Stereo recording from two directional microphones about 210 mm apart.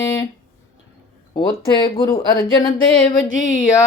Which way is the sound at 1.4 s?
20° left (ahead or behind).